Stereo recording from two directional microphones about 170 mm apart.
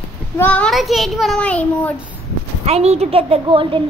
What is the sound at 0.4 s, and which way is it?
A child's voice, 10° left (ahead or behind).